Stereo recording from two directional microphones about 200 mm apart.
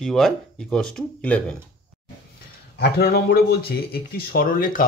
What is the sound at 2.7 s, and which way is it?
Speech, 55° left (ahead or behind).